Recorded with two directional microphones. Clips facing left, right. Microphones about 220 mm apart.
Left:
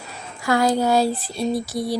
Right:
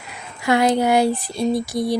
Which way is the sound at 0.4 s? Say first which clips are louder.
Right 2 dB; 20° right (ahead or behind).